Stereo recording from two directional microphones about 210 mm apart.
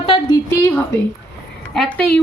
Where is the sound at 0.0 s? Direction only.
25° left (ahead or behind).